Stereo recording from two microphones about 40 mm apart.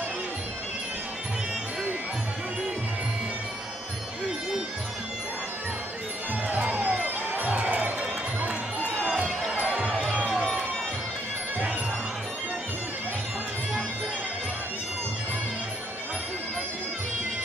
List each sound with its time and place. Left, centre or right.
6.7 s music: right
9.5 s music: right